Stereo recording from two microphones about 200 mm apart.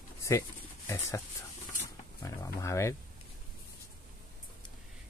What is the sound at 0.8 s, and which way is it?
Speech, 15° left (ahead or behind).